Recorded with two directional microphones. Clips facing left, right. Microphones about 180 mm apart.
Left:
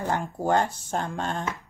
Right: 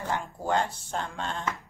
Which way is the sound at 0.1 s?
45° left (ahead or behind).